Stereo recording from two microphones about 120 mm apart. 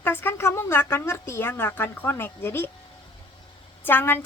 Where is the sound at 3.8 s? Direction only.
15° left (ahead or behind).